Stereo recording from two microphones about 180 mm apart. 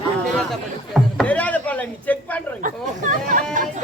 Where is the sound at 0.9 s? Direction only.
5° left (ahead or behind).